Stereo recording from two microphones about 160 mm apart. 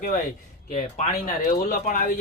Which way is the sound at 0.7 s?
50° left (ahead or behind).